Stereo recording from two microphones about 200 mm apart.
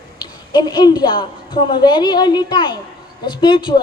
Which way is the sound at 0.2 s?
20° left (ahead or behind).